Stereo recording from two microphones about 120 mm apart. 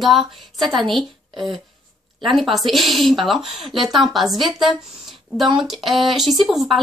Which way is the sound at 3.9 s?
Centre (ahead or behind).